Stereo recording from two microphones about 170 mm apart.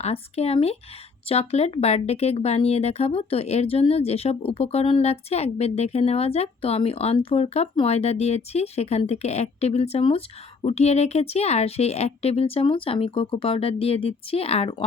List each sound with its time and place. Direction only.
0.0 s speech: 35° left (ahead or behind)